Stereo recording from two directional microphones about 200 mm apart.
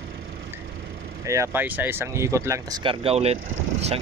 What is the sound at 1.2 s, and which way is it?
A man's voice, 15° right (ahead or behind).